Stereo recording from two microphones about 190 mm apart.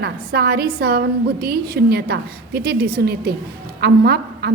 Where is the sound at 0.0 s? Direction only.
55° right (ahead or behind).